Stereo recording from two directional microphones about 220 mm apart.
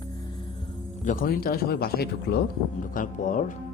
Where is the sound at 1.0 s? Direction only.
35° left (ahead or behind).